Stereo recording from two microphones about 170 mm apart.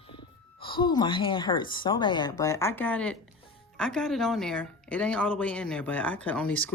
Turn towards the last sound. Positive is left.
turn(degrees=5)  # may be behind; listen again after turning